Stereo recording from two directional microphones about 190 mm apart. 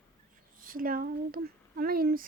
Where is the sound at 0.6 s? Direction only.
50° right (ahead or behind).